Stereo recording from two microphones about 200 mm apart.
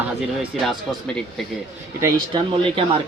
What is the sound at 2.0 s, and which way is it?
Speech, 20° right (ahead or behind).